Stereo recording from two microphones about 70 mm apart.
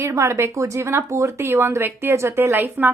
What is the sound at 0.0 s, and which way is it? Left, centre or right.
A woman's voice, right.